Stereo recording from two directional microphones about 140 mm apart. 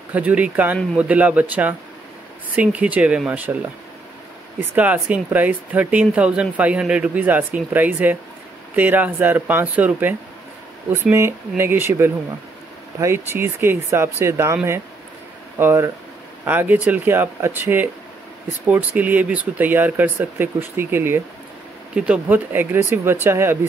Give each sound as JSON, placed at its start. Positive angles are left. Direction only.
{"t": 0.1, "sound": "speech", "side_deg": -10}
{"t": 4.6, "sound": "speech", "side_deg": -15}
{"t": 13.3, "sound": "speech", "side_deg": -15}